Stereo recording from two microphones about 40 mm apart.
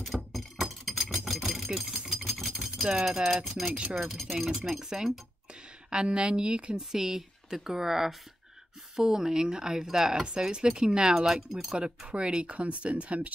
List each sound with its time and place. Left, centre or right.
0.0 s a sound: centre
1.7 s a sound: centre
3.1 s speech: centre
3.6 s speech: centre
5.9 s a woman's voice: right
6.8 s speech: centre
12.1 s speech: right